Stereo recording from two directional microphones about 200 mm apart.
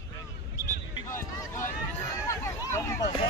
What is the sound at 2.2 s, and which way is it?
Hubbub, 15° left (ahead or behind).